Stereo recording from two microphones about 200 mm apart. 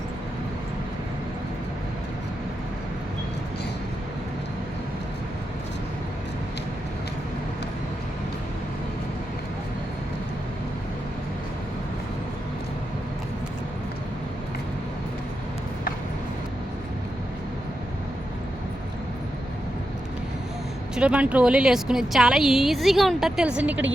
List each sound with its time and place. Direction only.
20.9 s a woman's voice: 5° right (ahead or behind)